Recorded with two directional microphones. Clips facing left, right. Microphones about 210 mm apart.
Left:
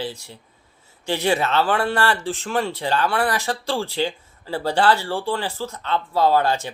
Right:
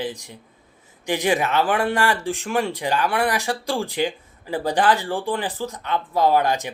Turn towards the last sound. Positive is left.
turn(degrees=-15)  # may be behind; listen again after turning